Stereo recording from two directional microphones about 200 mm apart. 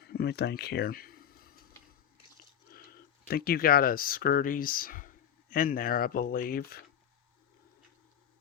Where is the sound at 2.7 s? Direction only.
50° left (ahead or behind).